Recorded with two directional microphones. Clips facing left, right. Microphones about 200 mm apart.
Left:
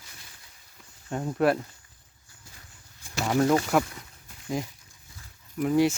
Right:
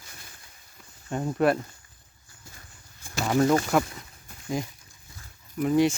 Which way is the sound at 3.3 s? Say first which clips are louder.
Right 1 dB; centre (ahead or behind).